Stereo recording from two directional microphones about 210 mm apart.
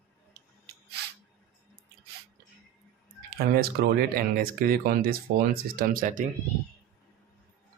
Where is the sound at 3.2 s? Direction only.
45° right (ahead or behind).